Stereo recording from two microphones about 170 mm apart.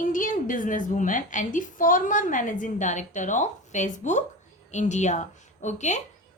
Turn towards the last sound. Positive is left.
turn(degrees=45)  # may be behind; listen again after turning